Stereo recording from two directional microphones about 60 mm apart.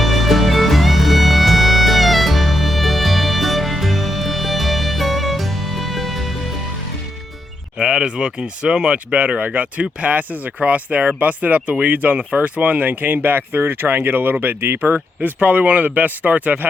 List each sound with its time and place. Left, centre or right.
0.0 s music: centre
7.8 s speech: centre